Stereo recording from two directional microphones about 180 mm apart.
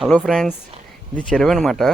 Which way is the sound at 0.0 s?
Centre (ahead or behind).